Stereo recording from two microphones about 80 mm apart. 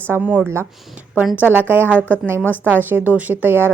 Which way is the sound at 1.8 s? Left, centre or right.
Left.